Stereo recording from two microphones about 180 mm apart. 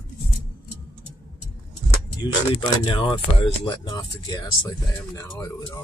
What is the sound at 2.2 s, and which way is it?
Speech, 30° left (ahead or behind).